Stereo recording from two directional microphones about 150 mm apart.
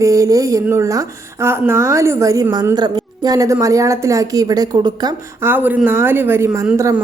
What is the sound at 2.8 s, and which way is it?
Speech, 25° right (ahead or behind).